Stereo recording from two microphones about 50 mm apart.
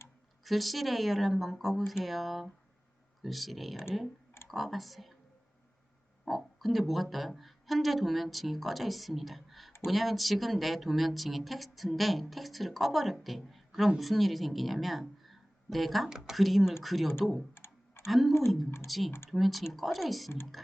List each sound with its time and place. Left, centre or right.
0.4 s speech: centre
6.2 s speech: centre
16.0 s speech: centre
16.3 s speech: centre
17.5 s typing: left
18.3 s speech: left
18.9 s speech: centre